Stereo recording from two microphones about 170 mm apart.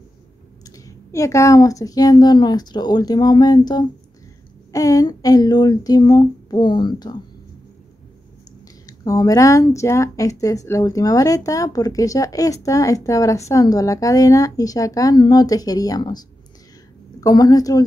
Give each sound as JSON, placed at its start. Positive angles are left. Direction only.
{"t": 0.7, "sound": "speech", "side_deg": 20}
{"t": 8.8, "sound": "speech", "side_deg": 20}
{"t": 17.2, "sound": "speech", "side_deg": 20}